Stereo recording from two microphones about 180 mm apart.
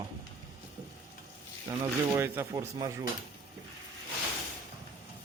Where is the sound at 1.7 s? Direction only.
20° right (ahead or behind).